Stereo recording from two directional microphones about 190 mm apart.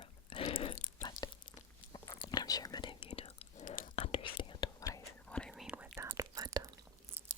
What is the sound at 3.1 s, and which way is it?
Whispering, 35° left (ahead or behind).